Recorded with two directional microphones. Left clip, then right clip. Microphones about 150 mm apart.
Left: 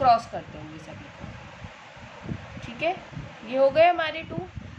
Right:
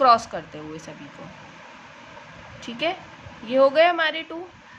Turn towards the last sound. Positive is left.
turn(degrees=-30)  # may be behind; listen again after turning